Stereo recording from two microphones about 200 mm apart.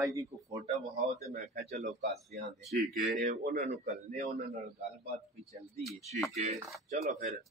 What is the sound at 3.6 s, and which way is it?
Speech, 35° right (ahead or behind).